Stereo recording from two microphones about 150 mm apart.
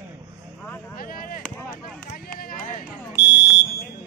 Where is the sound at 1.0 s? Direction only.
75° left (ahead or behind).